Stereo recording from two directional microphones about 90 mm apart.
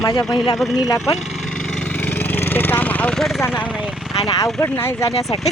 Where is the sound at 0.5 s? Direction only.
Centre (ahead or behind).